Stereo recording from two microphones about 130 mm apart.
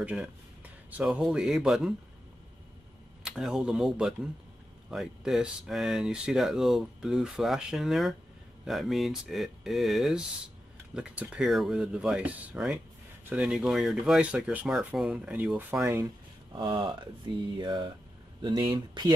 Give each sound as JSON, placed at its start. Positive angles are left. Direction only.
{"t": 0.0, "sound": "speech", "side_deg": -5}
{"t": 3.3, "sound": "speech", "side_deg": -5}
{"t": 16.5, "sound": "speech", "side_deg": -40}